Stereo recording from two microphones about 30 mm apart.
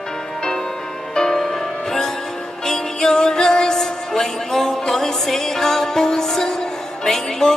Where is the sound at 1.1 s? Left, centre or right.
Centre.